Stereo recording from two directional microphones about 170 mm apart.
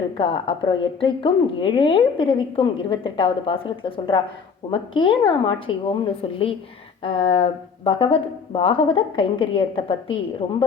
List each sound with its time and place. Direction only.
0.2 s a woman's voice: 30° left (ahead or behind)